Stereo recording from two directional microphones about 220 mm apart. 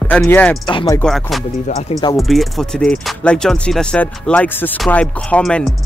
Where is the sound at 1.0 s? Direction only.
Centre (ahead or behind).